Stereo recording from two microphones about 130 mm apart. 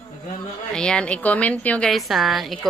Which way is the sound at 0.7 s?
5° left (ahead or behind).